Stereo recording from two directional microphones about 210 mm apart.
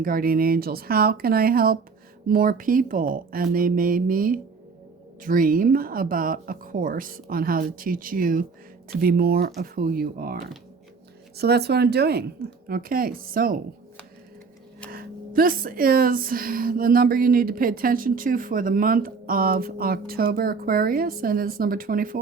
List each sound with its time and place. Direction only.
0.0 s speech: 45° right (ahead or behind)
14.8 s speech: 45° right (ahead or behind)